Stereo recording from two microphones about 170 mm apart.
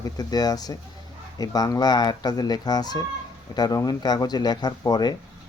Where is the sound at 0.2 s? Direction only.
20° left (ahead or behind).